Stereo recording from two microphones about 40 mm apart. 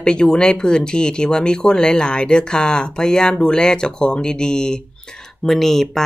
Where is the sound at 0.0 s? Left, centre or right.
Left.